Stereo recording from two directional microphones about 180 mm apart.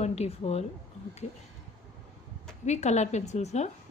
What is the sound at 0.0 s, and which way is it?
Speech, 35° left (ahead or behind).